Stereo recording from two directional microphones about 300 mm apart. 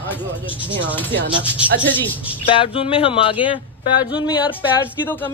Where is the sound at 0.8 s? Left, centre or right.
Centre.